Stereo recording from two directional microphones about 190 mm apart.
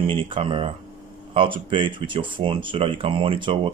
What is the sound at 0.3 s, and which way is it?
Speech, 30° right (ahead or behind).